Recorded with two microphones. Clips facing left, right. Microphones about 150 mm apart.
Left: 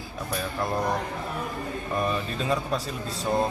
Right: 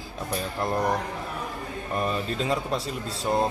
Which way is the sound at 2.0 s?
20° right (ahead or behind).